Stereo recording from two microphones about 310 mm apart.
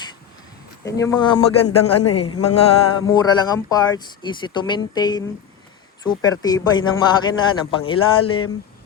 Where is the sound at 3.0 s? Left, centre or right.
Centre.